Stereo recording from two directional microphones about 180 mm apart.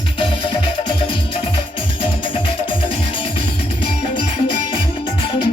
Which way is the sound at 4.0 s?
30° left (ahead or behind).